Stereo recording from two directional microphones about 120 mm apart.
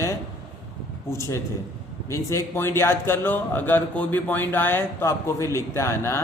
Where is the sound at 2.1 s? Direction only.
20° left (ahead or behind).